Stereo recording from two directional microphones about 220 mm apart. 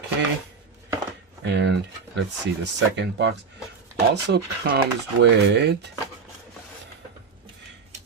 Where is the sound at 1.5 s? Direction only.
50° right (ahead or behind).